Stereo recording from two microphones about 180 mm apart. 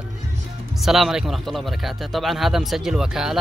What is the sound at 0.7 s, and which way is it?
Speech, centre (ahead or behind).